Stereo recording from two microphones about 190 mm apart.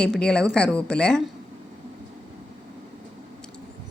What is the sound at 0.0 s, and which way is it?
A woman's voice, 5° left (ahead or behind).